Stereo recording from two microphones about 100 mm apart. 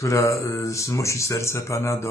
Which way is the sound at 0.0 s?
30° left (ahead or behind).